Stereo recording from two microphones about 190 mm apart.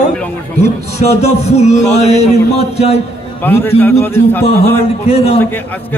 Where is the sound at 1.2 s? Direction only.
35° left (ahead or behind).